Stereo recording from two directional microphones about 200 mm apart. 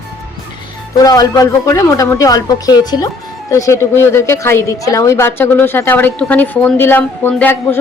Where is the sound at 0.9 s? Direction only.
20° left (ahead or behind).